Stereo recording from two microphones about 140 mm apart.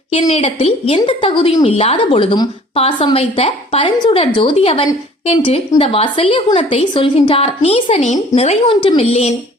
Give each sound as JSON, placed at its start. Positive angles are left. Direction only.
{"t": 0.1, "sound": "a woman's voice", "side_deg": 50}